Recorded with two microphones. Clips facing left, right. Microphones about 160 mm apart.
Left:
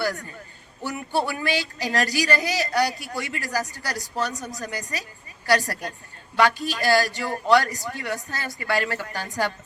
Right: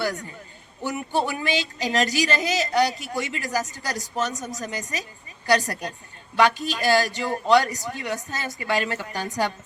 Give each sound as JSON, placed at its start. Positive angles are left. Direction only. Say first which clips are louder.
{"t": 0.0, "sound": "a man's voice", "louder": "even", "side_deg": -20}